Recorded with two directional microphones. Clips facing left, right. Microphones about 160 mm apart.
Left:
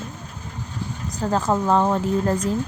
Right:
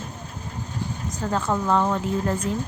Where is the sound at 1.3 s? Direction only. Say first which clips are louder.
Left 3 dB; 35° left (ahead or behind).